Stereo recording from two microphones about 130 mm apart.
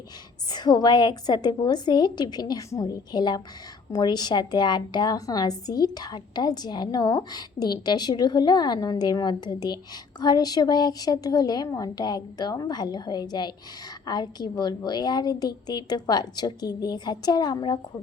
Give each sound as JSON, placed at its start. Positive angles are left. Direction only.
{"t": 0.5, "sound": "a woman's voice", "side_deg": 35}